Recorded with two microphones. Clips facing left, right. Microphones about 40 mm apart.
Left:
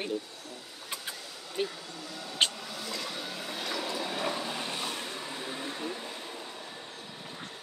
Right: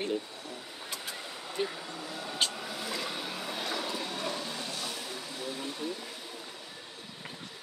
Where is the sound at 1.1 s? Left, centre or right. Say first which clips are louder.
Even; right.